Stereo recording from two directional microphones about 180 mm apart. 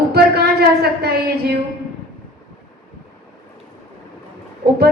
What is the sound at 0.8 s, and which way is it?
Speech, 60° right (ahead or behind).